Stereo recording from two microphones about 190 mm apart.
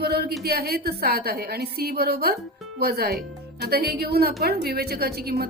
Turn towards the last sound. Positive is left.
turn(degrees=-55)  # may be behind; listen again after turning